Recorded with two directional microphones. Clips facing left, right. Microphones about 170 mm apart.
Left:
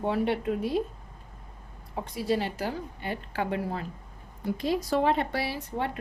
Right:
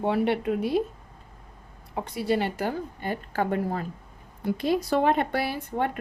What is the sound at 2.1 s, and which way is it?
A woman's voice, 60° right (ahead or behind).